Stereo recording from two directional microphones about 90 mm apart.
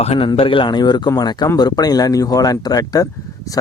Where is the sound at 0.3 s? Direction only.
70° left (ahead or behind).